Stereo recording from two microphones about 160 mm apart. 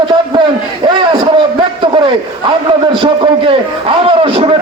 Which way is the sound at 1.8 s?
30° right (ahead or behind).